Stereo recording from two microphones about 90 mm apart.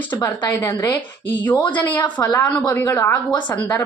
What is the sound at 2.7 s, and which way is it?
Speech, 30° left (ahead or behind).